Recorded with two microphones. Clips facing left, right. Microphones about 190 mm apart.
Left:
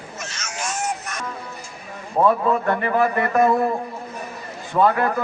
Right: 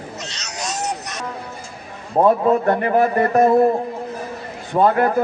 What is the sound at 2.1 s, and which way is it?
A man's voice, 35° right (ahead or behind).